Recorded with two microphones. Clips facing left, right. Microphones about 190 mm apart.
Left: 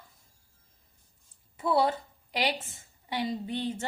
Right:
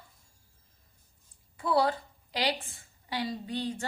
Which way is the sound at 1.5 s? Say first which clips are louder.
Left 1 dB; 25° left (ahead or behind).